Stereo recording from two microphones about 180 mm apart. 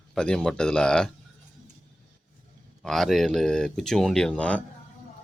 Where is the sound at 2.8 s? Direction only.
Centre (ahead or behind).